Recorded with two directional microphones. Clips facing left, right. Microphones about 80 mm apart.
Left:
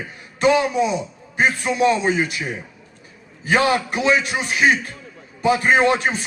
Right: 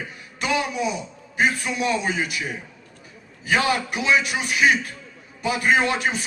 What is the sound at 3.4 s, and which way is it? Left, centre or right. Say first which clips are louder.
A man's voice: left 4 dB; left.